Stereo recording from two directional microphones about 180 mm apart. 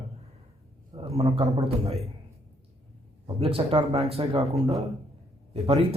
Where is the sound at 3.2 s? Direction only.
30° right (ahead or behind).